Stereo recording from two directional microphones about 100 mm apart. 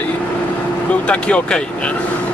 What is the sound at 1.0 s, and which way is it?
Speech, 10° left (ahead or behind).